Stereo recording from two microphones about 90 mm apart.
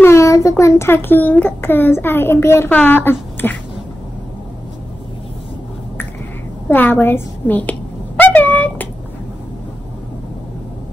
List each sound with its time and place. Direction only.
0.0 s a child's voice: 35° left (ahead or behind)
6.7 s a child's voice: 20° left (ahead or behind)